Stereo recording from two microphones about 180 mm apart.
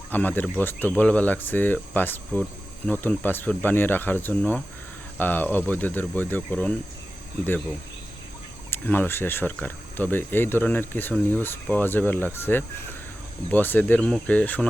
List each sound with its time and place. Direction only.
0.1 s speech: 10° left (ahead or behind)
8.7 s speech: 10° left (ahead or behind)